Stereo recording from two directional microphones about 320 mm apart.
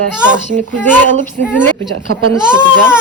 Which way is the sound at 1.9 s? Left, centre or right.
Right.